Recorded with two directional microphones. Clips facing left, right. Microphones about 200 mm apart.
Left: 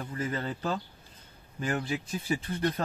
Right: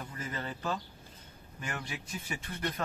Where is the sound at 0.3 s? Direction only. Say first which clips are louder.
Left 2 dB; 30° left (ahead or behind).